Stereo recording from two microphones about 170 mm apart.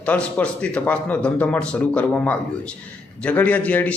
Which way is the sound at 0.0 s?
10° left (ahead or behind).